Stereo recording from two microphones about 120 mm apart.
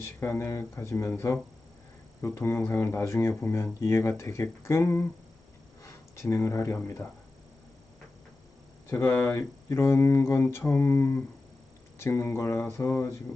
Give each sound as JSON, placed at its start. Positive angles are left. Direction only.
{"t": 0.0, "sound": "speech", "side_deg": 20}
{"t": 8.9, "sound": "speech", "side_deg": 20}